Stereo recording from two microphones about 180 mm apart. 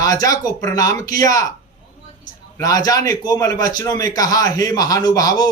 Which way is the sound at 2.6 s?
20° left (ahead or behind).